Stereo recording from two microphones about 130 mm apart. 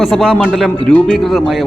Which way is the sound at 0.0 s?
Centre (ahead or behind).